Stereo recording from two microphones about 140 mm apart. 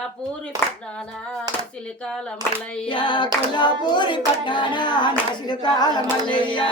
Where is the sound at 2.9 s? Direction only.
35° left (ahead or behind).